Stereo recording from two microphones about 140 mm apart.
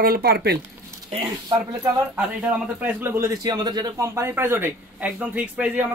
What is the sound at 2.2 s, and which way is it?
A man's voice, 10° right (ahead or behind).